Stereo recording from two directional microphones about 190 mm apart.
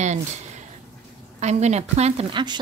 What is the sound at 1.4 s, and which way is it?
A woman's voice, 35° right (ahead or behind).